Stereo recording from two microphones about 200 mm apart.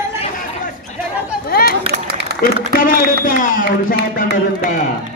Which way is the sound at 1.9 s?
50° right (ahead or behind).